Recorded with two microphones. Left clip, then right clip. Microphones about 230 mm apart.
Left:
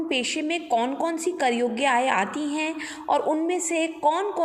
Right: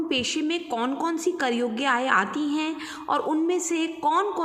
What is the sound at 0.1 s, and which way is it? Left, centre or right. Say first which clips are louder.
A woman's voice: left 1 dB; centre.